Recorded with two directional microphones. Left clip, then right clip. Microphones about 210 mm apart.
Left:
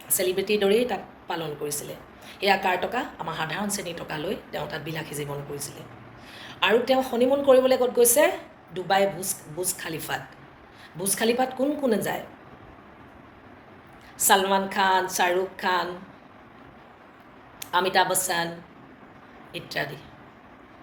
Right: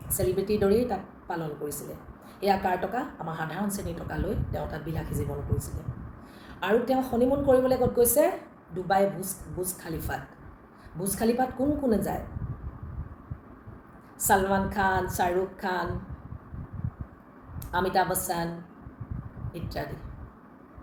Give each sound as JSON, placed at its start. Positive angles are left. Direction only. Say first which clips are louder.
{"t": 0.1, "sound": "a woman's voice", "louder": "left 3 dB", "side_deg": -10}
{"t": 14.3, "sound": "a woman's voice", "louder": "left 3 dB", "side_deg": -10}
{"t": 17.6, "sound": "a woman's voice", "louder": "left 4 dB", "side_deg": -10}
{"t": 19.5, "sound": "a woman's voice", "louder": "left 6 dB", "side_deg": -10}